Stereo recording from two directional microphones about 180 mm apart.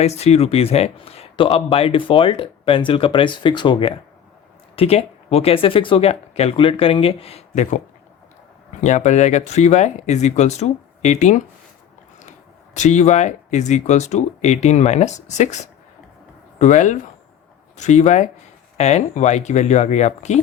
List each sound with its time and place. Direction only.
0.0 s speech: 35° left (ahead or behind)
8.8 s speech: 40° left (ahead or behind)
12.7 s speech: 40° left (ahead or behind)
16.6 s speech: 40° left (ahead or behind)